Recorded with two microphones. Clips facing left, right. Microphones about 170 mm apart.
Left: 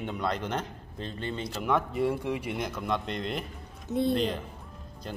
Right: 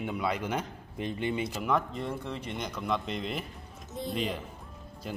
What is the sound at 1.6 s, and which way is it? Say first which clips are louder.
Speech: left 8 dB; centre (ahead or behind).